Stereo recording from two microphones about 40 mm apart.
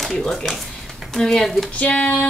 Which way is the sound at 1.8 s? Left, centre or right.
Left.